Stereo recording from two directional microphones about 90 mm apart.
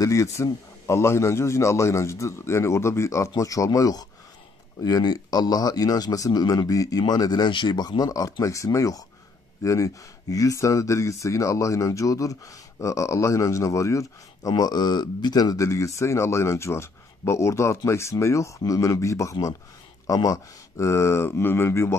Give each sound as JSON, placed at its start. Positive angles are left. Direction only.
{"t": 0.0, "sound": "speech", "side_deg": 35}
{"t": 14.5, "sound": "speech", "side_deg": 50}